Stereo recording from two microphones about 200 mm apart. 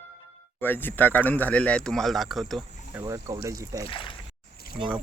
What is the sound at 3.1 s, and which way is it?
Speech, 15° right (ahead or behind).